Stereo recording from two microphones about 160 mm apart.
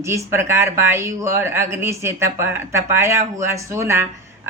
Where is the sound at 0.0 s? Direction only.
15° right (ahead or behind).